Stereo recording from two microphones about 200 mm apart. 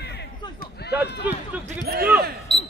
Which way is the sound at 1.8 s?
50° right (ahead or behind).